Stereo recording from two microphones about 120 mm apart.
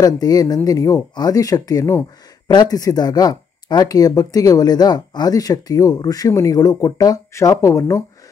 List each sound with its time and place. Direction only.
0.0 s speech: 30° left (ahead or behind)